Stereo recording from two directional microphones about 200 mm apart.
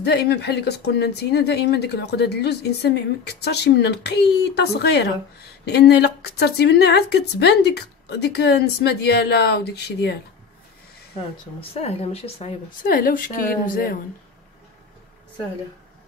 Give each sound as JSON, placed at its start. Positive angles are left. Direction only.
{"t": 0.0, "sound": "speech", "side_deg": 55}
{"t": 11.7, "sound": "speech", "side_deg": 30}
{"t": 12.8, "sound": "a woman's voice", "side_deg": 45}